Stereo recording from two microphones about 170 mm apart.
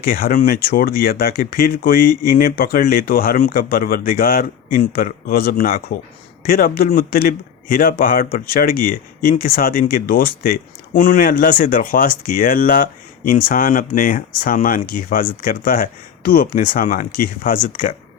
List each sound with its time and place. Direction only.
0.0 s a man's voice: 60° left (ahead or behind)